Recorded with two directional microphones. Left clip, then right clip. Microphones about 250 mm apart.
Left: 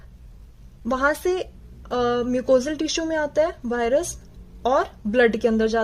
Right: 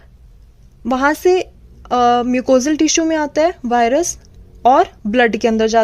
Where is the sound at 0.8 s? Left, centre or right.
Right.